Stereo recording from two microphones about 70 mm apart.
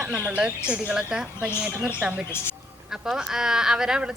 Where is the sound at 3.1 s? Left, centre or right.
Centre.